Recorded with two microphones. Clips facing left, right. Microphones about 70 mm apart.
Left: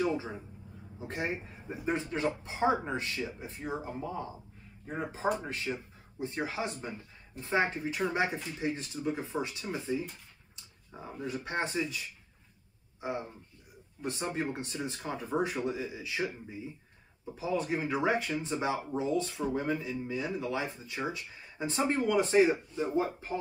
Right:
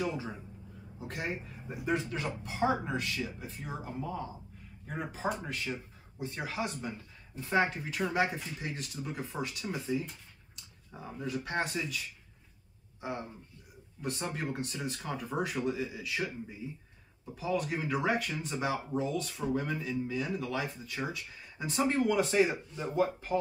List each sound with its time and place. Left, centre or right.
0.0 s a sound: left
0.9 s speech: left
5.5 s speech: left
10.9 s speech: centre
11.2 s speech: left
14.0 s speech: left